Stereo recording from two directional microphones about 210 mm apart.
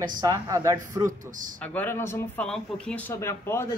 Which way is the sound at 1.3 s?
40° right (ahead or behind).